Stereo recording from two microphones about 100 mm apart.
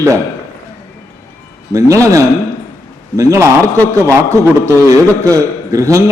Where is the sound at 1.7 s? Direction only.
35° right (ahead or behind).